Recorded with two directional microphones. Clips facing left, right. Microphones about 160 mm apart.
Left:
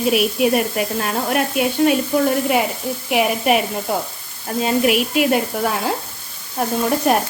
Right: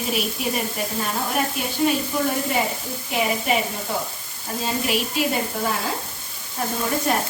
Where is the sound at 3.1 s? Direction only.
65° left (ahead or behind).